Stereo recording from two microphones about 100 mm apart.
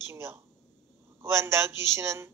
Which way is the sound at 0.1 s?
25° right (ahead or behind).